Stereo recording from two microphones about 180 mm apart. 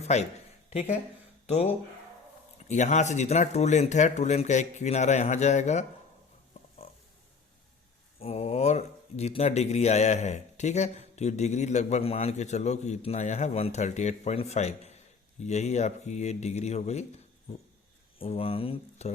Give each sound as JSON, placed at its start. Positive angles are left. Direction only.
{"t": 0.0, "sound": "speech", "side_deg": 40}
{"t": 8.2, "sound": "speech", "side_deg": 35}
{"t": 18.2, "sound": "speech", "side_deg": 30}